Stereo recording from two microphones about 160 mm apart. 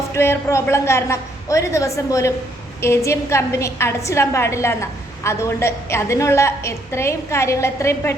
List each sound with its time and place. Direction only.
0.1 s a woman's voice: 15° left (ahead or behind)